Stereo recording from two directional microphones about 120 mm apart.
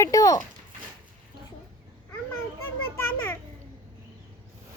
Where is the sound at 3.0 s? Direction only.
20° left (ahead or behind).